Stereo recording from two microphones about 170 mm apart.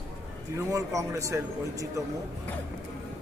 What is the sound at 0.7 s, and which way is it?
A man's voice, 20° right (ahead or behind).